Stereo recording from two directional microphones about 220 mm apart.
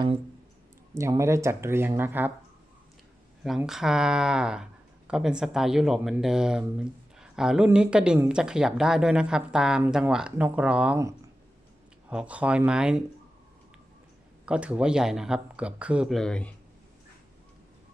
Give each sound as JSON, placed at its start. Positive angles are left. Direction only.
{"t": 0.9, "sound": "speech", "side_deg": -10}
{"t": 3.4, "sound": "speech", "side_deg": 0}
{"t": 14.4, "sound": "speech", "side_deg": -5}